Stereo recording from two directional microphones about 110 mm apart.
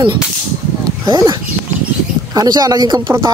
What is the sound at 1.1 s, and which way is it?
Speech, 30° right (ahead or behind).